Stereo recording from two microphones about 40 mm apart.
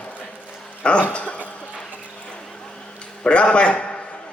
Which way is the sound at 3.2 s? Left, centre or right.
Left.